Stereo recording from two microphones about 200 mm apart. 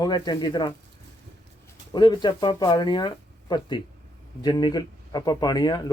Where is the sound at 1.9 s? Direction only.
20° left (ahead or behind).